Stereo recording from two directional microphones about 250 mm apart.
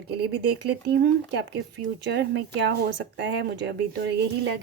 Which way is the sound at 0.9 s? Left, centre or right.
Right.